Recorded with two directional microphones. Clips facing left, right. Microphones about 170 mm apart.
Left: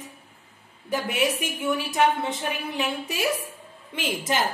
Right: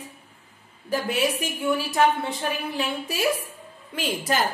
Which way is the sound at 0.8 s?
20° left (ahead or behind).